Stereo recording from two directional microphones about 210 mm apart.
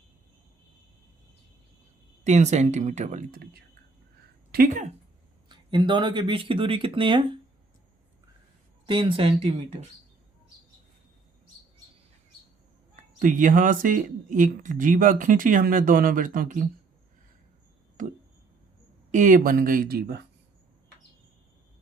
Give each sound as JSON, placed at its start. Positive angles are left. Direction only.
{"t": 2.2, "sound": "speech", "side_deg": -35}
{"t": 5.5, "sound": "speech", "side_deg": -20}
{"t": 8.9, "sound": "speech", "side_deg": -25}
{"t": 13.1, "sound": "speech", "side_deg": -40}
{"t": 18.0, "sound": "a sound", "side_deg": -40}
{"t": 19.1, "sound": "speech", "side_deg": -40}